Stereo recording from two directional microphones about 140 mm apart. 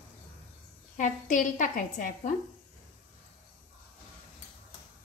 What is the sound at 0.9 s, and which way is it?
A woman's voice, 65° left (ahead or behind).